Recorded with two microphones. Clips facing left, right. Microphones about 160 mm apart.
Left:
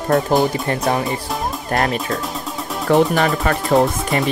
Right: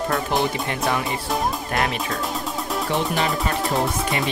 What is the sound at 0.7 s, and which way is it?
Speech, 35° left (ahead or behind).